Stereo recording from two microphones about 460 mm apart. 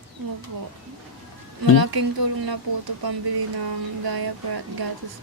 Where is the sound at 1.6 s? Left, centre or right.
Right.